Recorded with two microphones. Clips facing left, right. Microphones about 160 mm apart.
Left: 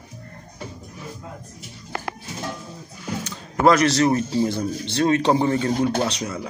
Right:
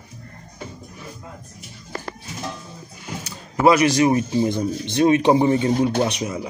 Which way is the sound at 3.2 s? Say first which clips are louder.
Right 1 dB; 10° right (ahead or behind).